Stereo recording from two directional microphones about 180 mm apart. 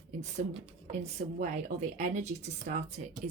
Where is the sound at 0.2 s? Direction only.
40° right (ahead or behind).